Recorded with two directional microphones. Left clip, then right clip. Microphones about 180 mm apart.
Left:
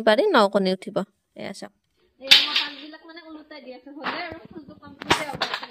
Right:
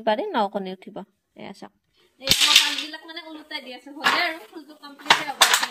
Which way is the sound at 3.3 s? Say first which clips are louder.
Right 4 dB; 15° right (ahead or behind).